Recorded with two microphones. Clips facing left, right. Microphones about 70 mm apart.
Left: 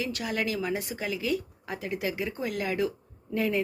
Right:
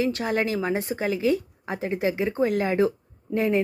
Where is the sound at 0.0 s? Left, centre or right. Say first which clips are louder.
Right 6 dB; right.